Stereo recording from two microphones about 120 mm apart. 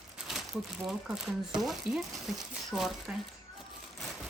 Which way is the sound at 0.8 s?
5° right (ahead or behind).